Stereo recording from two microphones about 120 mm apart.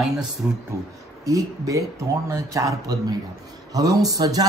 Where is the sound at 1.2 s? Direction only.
30° right (ahead or behind).